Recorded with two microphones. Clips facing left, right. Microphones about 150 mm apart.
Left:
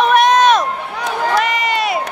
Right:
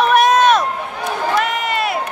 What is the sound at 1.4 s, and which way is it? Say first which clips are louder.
Crowd: left 2 dB; centre (ahead or behind).